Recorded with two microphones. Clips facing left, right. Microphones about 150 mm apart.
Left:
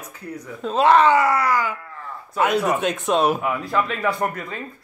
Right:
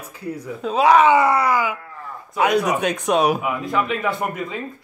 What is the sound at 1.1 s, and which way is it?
Speech, 20° right (ahead or behind).